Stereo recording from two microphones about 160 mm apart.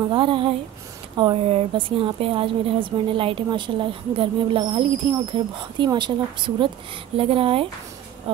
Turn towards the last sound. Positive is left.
turn(degrees=-35)  # may be behind; listen again after turning